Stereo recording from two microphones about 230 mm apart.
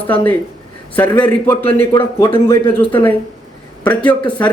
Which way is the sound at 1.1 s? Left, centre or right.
Centre.